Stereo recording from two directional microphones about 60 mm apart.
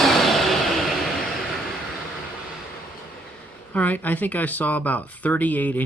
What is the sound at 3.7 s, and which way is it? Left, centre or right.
Speech, left.